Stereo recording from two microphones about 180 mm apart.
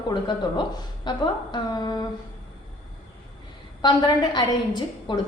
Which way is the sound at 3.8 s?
25° left (ahead or behind).